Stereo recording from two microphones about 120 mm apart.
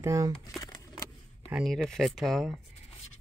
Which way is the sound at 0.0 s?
25° right (ahead or behind).